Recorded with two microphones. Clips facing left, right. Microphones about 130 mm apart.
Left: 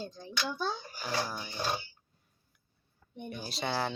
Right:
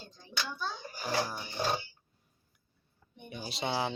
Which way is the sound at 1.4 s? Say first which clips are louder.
Right 1 dB; 5° right (ahead or behind).